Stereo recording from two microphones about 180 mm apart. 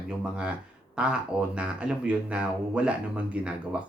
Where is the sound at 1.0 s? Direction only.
5° right (ahead or behind).